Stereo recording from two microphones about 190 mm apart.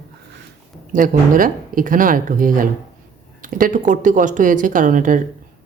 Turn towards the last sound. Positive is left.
turn(degrees=-45)  # may be behind; listen again after turning